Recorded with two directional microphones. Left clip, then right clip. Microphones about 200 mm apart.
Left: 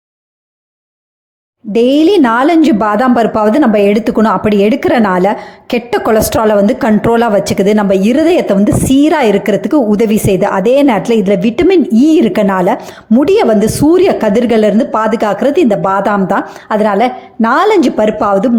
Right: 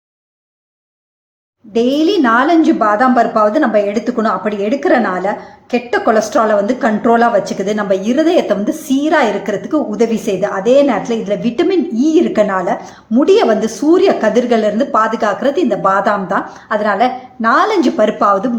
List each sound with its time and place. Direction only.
1.7 s a woman's voice: 40° left (ahead or behind)